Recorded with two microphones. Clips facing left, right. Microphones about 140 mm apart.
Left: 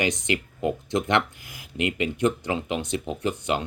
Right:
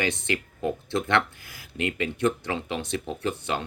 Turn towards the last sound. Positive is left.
turn(degrees=15)  # may be behind; listen again after turning